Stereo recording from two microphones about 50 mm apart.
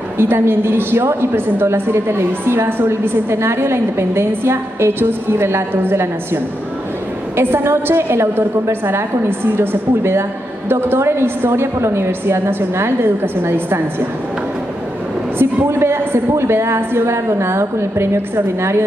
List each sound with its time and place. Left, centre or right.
0.2 s a woman's voice: right
15.3 s a woman's voice: right